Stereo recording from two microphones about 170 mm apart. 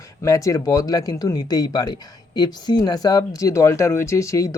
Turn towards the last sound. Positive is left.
turn(degrees=20)  # may be behind; listen again after turning